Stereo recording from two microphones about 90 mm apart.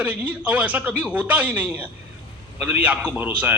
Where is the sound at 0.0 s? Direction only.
15° right (ahead or behind).